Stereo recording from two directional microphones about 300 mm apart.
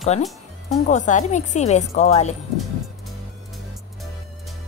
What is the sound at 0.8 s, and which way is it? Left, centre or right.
A woman's voice, left.